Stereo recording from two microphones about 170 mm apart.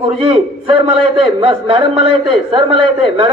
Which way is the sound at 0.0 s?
35° right (ahead or behind).